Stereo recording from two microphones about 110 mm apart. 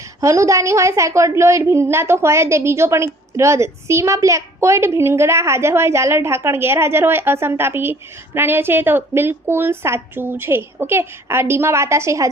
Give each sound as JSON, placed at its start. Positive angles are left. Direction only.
{"t": 0.2, "sound": "a woman's voice", "side_deg": -30}